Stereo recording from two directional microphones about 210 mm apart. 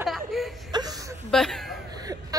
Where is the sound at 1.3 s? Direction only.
Centre (ahead or behind).